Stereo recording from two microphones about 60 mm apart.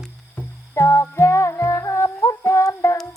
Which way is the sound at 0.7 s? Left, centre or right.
Left.